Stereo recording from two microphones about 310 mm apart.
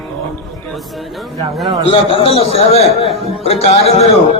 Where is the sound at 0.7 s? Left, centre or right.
Centre.